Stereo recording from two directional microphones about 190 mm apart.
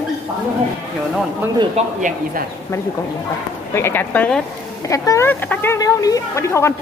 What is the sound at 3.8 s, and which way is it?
Speech, 10° left (ahead or behind).